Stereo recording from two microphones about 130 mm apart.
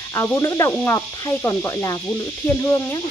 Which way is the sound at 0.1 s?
20° left (ahead or behind).